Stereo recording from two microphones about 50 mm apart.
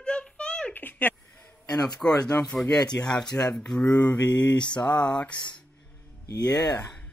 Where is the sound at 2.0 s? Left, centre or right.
Centre.